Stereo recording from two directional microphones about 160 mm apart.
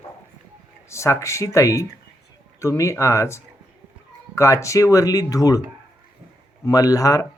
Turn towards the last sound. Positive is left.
turn(degrees=20)  # may be behind; listen again after turning